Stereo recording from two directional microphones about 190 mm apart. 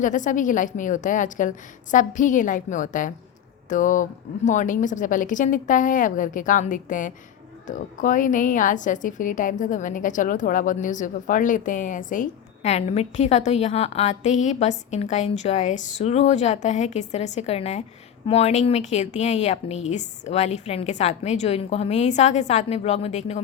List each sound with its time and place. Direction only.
0.0 s a woman's voice: 40° left (ahead or behind)